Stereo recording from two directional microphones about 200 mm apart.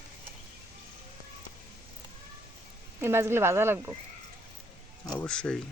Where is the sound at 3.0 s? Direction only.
10° right (ahead or behind).